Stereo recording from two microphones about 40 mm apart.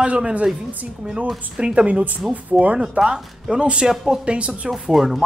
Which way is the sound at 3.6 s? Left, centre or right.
Right.